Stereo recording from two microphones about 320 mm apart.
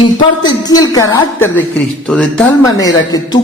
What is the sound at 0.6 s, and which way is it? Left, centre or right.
Speech, centre.